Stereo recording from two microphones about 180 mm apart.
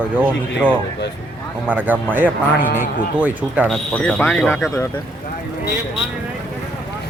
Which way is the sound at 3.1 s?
10° right (ahead or behind).